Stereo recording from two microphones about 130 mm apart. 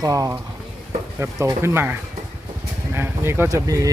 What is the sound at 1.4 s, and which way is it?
Speech, 20° right (ahead or behind).